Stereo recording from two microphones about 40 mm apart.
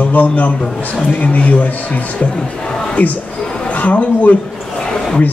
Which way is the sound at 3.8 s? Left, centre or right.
Left.